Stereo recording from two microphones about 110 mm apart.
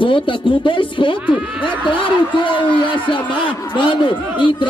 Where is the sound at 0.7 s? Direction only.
50° left (ahead or behind).